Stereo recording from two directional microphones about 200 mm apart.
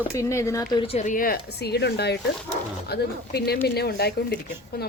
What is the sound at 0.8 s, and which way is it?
Speech, 30° left (ahead or behind).